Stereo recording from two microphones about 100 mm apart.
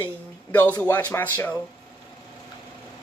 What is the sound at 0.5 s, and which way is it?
Speech, 20° left (ahead or behind).